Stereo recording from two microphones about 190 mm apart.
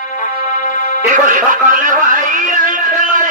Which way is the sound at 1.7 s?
45° right (ahead or behind).